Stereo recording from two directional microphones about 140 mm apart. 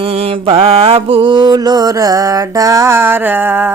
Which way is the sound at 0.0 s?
45° right (ahead or behind).